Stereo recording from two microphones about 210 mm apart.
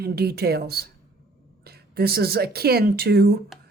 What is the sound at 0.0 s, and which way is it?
Speech, 50° right (ahead or behind).